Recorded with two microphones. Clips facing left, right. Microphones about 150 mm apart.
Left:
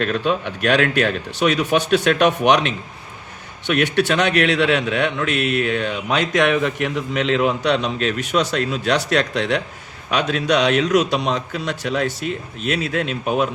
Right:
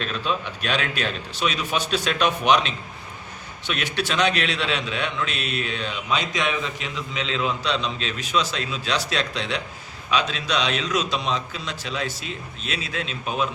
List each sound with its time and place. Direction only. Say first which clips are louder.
0.0 s a man's voice: left 7 dB; 60° left (ahead or behind)